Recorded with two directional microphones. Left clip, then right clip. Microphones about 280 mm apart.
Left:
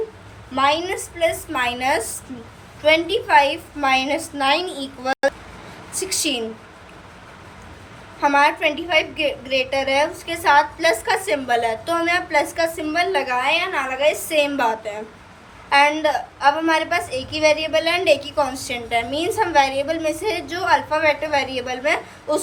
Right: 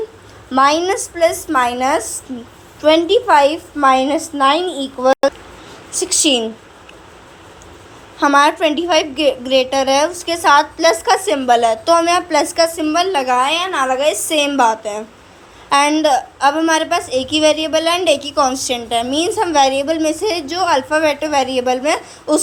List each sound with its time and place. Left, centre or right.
0.5 s a woman's voice: centre
8.2 s a woman's voice: centre